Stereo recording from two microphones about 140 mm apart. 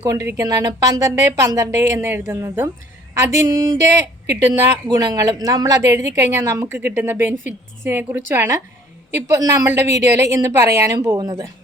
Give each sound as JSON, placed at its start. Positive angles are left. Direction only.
{"t": 0.3, "sound": "a woman's voice", "side_deg": -25}